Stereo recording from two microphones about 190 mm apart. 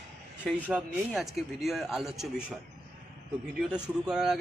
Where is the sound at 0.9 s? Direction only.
Centre (ahead or behind).